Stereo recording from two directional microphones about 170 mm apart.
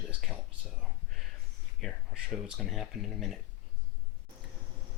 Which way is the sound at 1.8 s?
Centre (ahead or behind).